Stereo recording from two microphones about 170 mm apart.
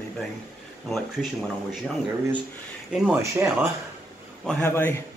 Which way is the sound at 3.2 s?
15° right (ahead or behind).